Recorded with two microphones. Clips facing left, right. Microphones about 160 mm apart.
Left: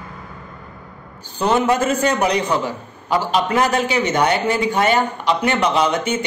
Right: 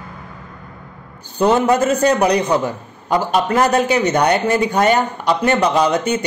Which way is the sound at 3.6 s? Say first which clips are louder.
Right 5 dB; 40° right (ahead or behind).